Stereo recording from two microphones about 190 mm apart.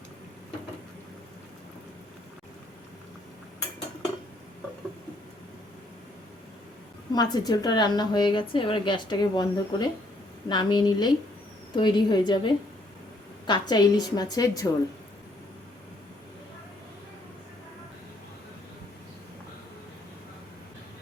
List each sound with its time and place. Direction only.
7.1 s a woman's voice: 20° left (ahead or behind)